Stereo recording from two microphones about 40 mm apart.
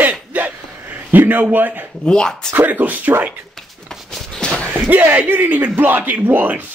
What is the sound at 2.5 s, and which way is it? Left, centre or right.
Speech, right.